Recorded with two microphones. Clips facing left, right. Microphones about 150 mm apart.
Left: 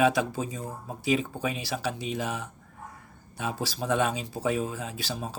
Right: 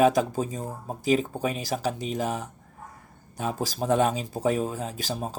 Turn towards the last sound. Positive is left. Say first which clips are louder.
# right 3 dB
turn(degrees=-45)  # may be behind; listen again after turning